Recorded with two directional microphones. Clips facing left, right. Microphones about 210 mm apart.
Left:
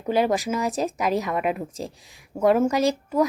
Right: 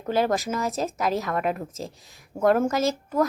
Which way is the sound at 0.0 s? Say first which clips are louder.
Left 2 dB; 10° left (ahead or behind).